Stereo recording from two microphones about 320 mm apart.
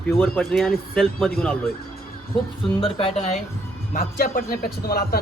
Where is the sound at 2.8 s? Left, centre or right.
Centre.